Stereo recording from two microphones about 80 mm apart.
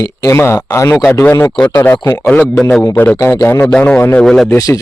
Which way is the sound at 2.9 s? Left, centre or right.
Left.